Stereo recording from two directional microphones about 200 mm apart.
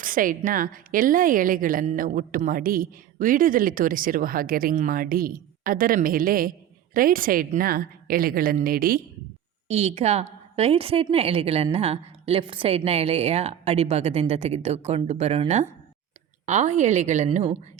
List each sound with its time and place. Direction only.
0.0 s a woman's voice: 45° right (ahead or behind)
9.6 s a woman's voice: 30° right (ahead or behind)